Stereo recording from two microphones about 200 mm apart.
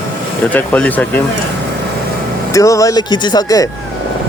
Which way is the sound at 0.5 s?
10° left (ahead or behind).